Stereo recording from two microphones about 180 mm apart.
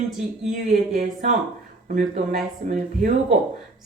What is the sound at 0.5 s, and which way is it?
Speech, 40° right (ahead or behind).